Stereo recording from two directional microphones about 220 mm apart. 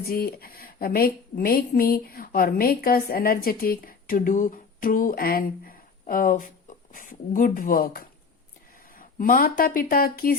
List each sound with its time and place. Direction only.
0.1 s a woman's voice: 45° left (ahead or behind)